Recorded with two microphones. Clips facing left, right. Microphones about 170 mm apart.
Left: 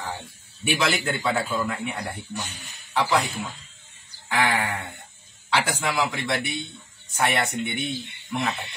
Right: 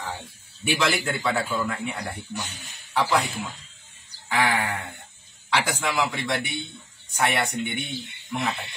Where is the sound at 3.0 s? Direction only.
10° left (ahead or behind).